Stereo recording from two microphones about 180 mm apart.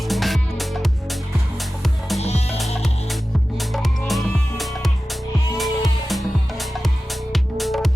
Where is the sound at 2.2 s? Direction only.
35° left (ahead or behind).